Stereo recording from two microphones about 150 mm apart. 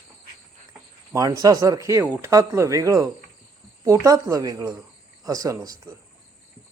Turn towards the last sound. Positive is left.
turn(degrees=-20)  # may be behind; listen again after turning